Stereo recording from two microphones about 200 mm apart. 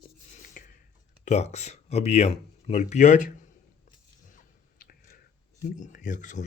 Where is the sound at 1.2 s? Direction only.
35° left (ahead or behind).